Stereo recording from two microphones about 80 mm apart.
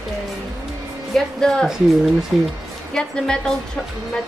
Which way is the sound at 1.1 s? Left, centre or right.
Centre.